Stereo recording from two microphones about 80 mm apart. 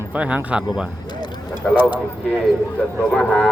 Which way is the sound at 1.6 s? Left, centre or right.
Centre.